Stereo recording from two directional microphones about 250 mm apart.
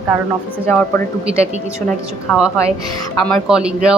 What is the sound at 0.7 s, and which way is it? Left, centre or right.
Speech, centre.